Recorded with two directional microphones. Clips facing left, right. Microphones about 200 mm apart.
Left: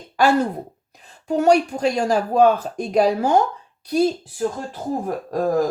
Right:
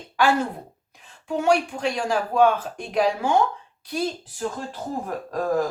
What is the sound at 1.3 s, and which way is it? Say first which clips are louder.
Speech: left 5 dB; 40° left (ahead or behind).